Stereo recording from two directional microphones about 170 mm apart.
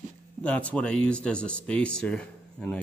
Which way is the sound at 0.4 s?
5° left (ahead or behind).